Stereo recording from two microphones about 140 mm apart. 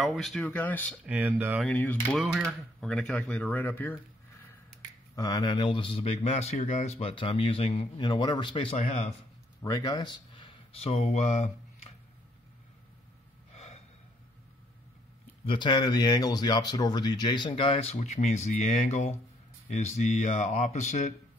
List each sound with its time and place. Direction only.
0.0 s speech: centre (ahead or behind)
1.0 s speech: 10° right (ahead or behind)
1.8 s speech: 15° left (ahead or behind)
2.1 s speech: centre (ahead or behind)
5.1 s speech: 25° left (ahead or behind)
8.7 s speech: 50° left (ahead or behind)
9.6 s speech: 25° left (ahead or behind); by 11.5 s 55° left (ahead or behind)
15.4 s speech: 35° left (ahead or behind)
17.9 s speech: 55° left (ahead or behind)